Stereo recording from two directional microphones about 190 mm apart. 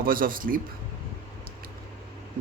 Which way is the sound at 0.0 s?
50° right (ahead or behind).